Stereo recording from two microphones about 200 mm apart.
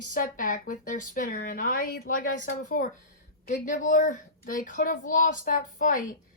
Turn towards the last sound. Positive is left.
turn(degrees=40)  # may be behind; listen again after turning